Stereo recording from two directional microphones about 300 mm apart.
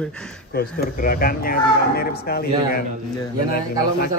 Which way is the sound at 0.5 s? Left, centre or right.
Left.